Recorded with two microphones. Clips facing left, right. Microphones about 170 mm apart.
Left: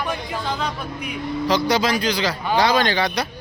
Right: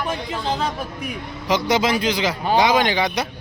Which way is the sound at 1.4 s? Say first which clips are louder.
Right 1 dB; 20° right (ahead or behind).